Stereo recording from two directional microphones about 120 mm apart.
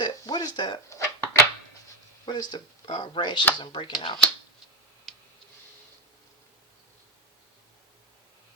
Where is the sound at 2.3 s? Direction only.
35° left (ahead or behind).